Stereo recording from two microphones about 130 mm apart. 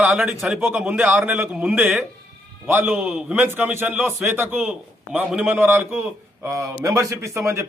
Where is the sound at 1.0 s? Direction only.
15° right (ahead or behind).